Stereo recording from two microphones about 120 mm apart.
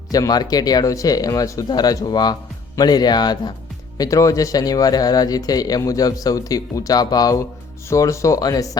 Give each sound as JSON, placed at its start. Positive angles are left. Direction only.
{"t": 0.1, "sound": "speech", "side_deg": 30}